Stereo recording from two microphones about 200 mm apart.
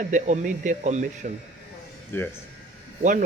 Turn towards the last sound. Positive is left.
turn(degrees=-40)  # may be behind; listen again after turning